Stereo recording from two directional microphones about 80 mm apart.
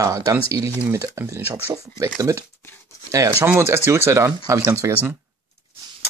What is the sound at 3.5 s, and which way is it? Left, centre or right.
Speech, right.